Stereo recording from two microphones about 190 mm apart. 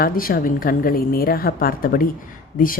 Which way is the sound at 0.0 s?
50° left (ahead or behind).